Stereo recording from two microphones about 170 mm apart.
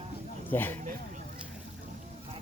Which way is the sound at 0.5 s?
10° left (ahead or behind).